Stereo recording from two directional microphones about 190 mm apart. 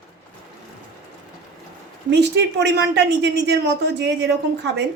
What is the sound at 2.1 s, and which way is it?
Speech, 60° right (ahead or behind).